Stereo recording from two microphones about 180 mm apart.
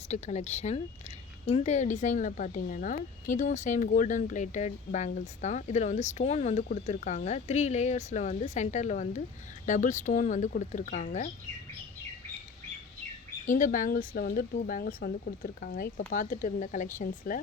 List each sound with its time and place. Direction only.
0.1 s speech: 40° left (ahead or behind)
13.4 s speech: 45° left (ahead or behind)